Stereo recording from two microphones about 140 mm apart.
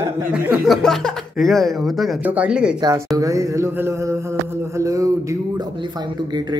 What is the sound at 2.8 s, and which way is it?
Speech, 25° right (ahead or behind).